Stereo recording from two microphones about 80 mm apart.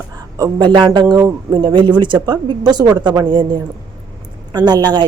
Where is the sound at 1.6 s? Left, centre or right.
Right.